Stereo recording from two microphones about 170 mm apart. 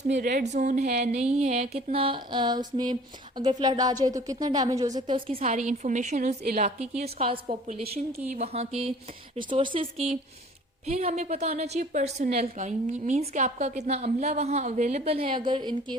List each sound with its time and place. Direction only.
0.3 s speech: 45° right (ahead or behind); by 16.0 s 25° right (ahead or behind)